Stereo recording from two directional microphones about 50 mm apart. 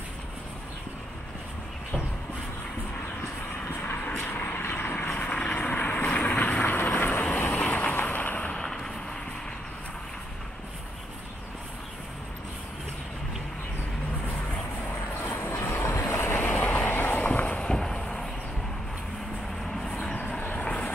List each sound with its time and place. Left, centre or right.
3.8 s vehicle: left
5.2 s vehicle: left
6.6 s vehicle: left
8.5 s vehicle: centre
15.2 s vehicle: left
17.6 s a sound: centre
19.7 s vehicle: centre
20.1 s vehicle: left